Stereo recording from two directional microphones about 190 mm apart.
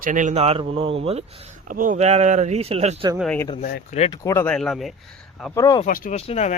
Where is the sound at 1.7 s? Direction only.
45° right (ahead or behind).